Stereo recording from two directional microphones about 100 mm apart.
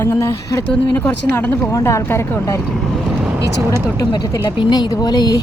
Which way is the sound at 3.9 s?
45° left (ahead or behind).